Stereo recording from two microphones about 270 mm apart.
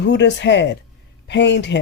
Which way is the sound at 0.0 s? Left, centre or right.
Left.